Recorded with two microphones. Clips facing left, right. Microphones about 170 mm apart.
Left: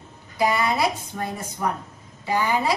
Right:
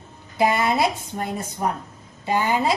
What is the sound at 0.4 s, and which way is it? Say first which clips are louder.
A woman's voice: right 2 dB; 25° right (ahead or behind).